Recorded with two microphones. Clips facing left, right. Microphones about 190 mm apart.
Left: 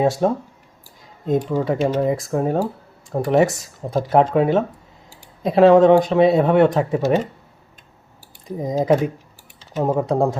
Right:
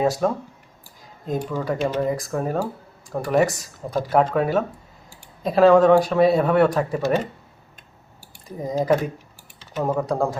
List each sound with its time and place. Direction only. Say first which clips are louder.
0.0 s speech: left 3 dB; 25° left (ahead or behind)
1.5 s speech: left 4 dB; 25° left (ahead or behind)
8.4 s speech: left 3 dB; 20° left (ahead or behind)